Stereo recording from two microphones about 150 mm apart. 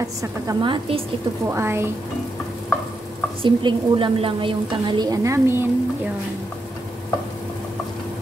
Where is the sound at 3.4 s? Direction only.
35° right (ahead or behind); by 5.6 s 20° right (ahead or behind).